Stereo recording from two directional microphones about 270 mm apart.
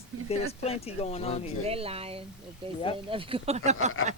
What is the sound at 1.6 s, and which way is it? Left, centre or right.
Speech, right.